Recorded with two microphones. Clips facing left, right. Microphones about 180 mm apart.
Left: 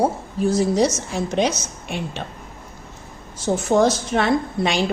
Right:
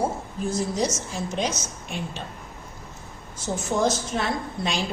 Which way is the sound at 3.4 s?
65° left (ahead or behind).